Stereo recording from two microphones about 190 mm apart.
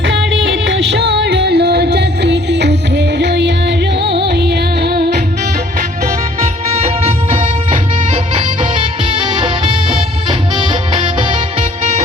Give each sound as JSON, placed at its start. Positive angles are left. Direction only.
{"t": 0.1, "sound": "music", "side_deg": -70}
{"t": 6.4, "sound": "music", "side_deg": -35}